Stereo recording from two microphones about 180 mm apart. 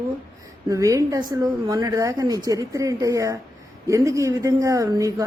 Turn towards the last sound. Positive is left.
turn(degrees=-20)  # may be behind; listen again after turning